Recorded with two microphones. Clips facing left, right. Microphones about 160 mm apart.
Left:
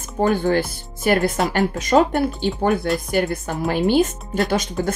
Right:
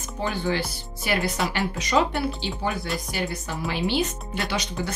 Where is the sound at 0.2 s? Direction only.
45° left (ahead or behind).